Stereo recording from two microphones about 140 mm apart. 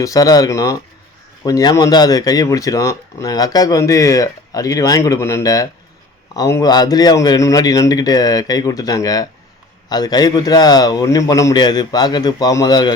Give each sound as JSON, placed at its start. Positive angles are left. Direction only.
{"t": 0.0, "sound": "speech", "side_deg": 25}